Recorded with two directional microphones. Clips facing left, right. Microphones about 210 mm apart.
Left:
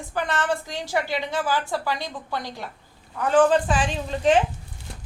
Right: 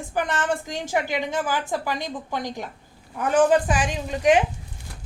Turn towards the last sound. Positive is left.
turn(degrees=-15)  # may be behind; listen again after turning